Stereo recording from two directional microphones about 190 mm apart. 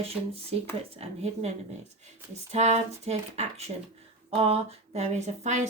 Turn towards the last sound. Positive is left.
turn(degrees=-40)  # may be behind; listen again after turning